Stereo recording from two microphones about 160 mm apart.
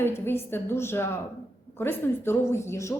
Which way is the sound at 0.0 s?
15° left (ahead or behind).